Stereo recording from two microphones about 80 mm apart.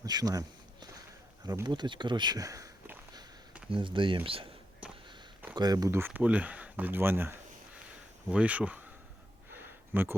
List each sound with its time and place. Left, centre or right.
0.0 s a sound: right
1.6 s speech: right
2.4 s speech: right
3.7 s speech: right
5.5 s speech: right
5.9 s speech: right
8.3 s speech: centre
9.6 s a sound: right